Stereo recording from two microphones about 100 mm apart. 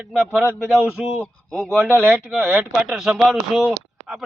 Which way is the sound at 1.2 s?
5° left (ahead or behind).